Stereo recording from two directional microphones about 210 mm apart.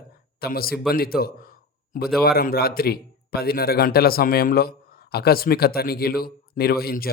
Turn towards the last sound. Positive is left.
turn(degrees=45)  # may be behind; listen again after turning